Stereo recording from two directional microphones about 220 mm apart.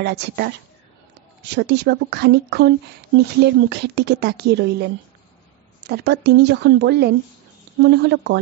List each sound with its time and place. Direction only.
0.0 s speech: 50° right (ahead or behind)
5.9 s speech: 50° right (ahead or behind)